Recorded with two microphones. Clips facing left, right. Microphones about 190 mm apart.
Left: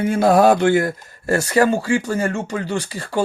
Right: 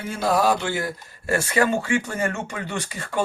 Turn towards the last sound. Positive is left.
turn(degrees=30)  # may be behind; listen again after turning